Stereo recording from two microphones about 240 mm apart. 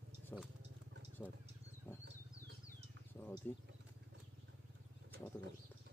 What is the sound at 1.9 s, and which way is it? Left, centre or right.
Vehicle, centre.